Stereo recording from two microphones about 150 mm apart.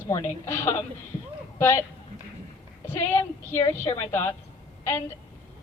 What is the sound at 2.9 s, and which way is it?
A woman's voice, 15° left (ahead or behind).